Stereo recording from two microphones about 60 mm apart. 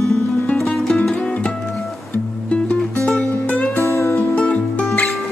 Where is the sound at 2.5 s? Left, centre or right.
Left.